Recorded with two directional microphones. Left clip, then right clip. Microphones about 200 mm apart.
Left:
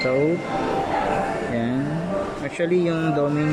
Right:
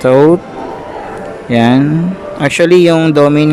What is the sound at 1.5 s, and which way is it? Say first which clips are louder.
Speech: right 15 dB; 50° right (ahead or behind).